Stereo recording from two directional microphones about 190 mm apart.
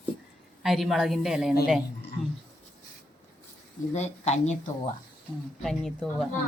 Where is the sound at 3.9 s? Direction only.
35° left (ahead or behind).